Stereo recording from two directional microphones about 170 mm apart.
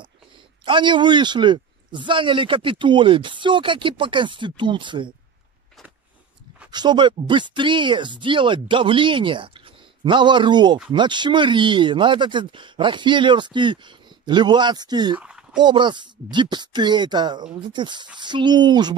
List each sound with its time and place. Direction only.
0.7 s speech: 30° right (ahead or behind)
6.7 s speech: 25° right (ahead or behind)
15.1 s a sound: 5° right (ahead or behind)
15.6 s speech: 25° right (ahead or behind)